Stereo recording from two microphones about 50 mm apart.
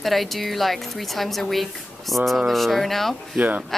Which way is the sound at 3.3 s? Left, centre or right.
Right.